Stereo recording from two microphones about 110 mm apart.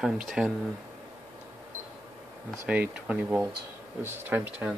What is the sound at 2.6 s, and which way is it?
Speech, 10° right (ahead or behind).